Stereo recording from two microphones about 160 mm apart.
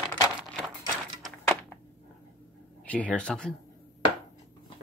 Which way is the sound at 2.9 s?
10° left (ahead or behind).